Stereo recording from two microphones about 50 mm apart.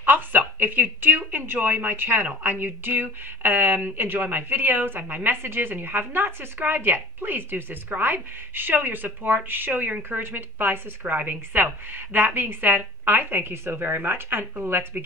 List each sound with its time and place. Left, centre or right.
0.0 s speech: right